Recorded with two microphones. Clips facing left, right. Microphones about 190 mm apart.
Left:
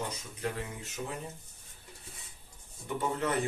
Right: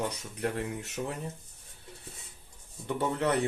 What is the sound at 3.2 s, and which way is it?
Speech, 70° right (ahead or behind).